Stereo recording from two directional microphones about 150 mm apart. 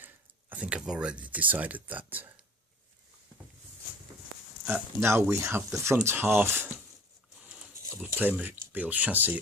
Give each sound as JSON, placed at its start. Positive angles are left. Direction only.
{"t": 0.5, "sound": "speech", "side_deg": -10}
{"t": 4.6, "sound": "speech", "side_deg": -15}